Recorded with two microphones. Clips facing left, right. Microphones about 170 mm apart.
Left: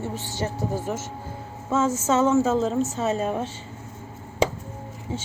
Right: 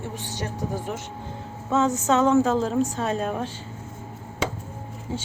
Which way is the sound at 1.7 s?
Centre (ahead or behind).